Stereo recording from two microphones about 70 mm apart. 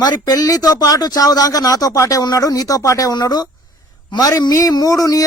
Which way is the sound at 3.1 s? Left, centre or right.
Left.